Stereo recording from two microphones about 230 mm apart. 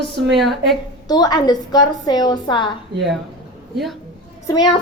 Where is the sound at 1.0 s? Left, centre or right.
Centre.